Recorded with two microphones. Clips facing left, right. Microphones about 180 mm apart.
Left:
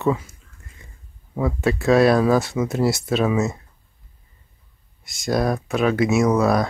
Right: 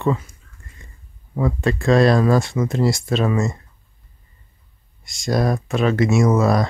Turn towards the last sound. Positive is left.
turn(degrees=0)  # may be behind; listen again after turning